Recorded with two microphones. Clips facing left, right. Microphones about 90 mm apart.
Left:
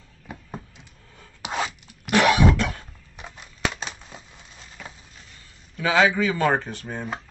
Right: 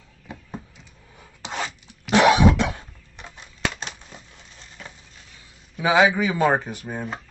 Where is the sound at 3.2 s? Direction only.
5° left (ahead or behind).